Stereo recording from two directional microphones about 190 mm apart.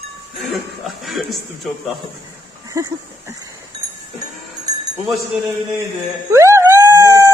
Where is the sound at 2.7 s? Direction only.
15° right (ahead or behind).